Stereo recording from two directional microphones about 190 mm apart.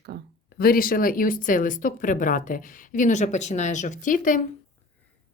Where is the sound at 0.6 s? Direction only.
50° left (ahead or behind).